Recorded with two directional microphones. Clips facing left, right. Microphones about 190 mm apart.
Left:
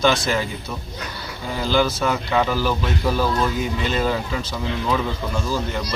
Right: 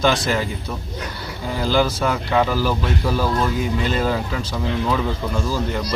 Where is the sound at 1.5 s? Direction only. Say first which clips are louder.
Right 1 dB; 5° right (ahead or behind).